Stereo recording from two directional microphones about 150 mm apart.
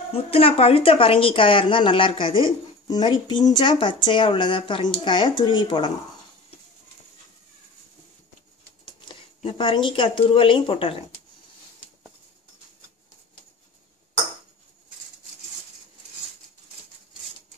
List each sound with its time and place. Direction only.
0.1 s speech: 40° left (ahead or behind)
8.8 s speech: 30° left (ahead or behind)